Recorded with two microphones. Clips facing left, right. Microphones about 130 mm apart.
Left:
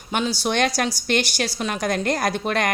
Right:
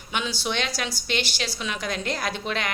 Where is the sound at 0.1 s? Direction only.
45° left (ahead or behind).